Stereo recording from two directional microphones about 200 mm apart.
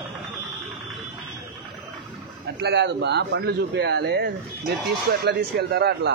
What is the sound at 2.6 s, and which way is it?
Speech, 60° right (ahead or behind).